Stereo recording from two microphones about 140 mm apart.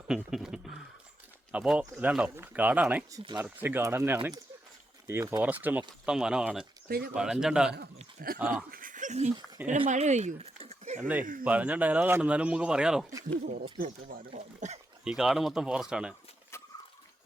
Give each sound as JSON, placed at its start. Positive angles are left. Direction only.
{"t": 0.1, "sound": "speech", "side_deg": -5}
{"t": 5.4, "sound": "speech", "side_deg": -10}
{"t": 6.8, "sound": "speech", "side_deg": -90}
{"t": 7.1, "sound": "speech", "side_deg": -5}
{"t": 8.4, "sound": "speech", "side_deg": -80}
{"t": 9.6, "sound": "speech", "side_deg": -15}
{"t": 9.9, "sound": "speech", "side_deg": -55}
{"t": 11.4, "sound": "speech", "side_deg": -10}
{"t": 13.7, "sound": "speech", "side_deg": -90}
{"t": 14.3, "sound": "speech", "side_deg": -55}
{"t": 15.0, "sound": "speech", "side_deg": -5}